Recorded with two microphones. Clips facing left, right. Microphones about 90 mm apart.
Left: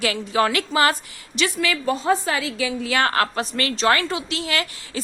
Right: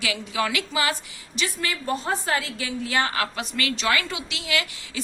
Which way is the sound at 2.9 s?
70° left (ahead or behind).